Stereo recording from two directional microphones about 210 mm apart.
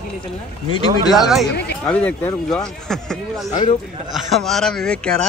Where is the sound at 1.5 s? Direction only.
55° left (ahead or behind).